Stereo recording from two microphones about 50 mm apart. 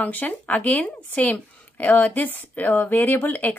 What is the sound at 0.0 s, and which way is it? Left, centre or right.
A woman's voice, left.